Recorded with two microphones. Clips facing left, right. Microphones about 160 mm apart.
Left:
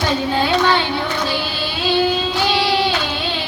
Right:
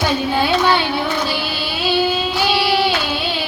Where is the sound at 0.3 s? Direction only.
10° right (ahead or behind).